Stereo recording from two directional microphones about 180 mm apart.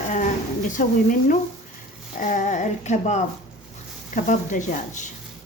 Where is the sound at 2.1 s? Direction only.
50° left (ahead or behind).